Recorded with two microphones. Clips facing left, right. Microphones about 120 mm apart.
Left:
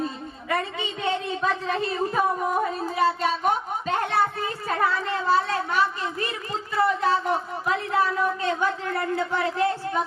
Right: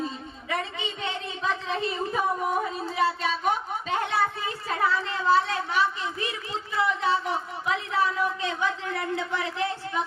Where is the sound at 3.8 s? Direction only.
50° left (ahead or behind).